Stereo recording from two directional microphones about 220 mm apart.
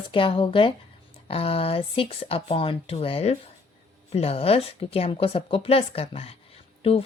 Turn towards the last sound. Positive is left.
turn(degrees=25)  # may be behind; listen again after turning